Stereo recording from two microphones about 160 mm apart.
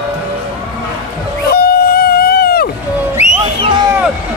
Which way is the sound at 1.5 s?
70° left (ahead or behind).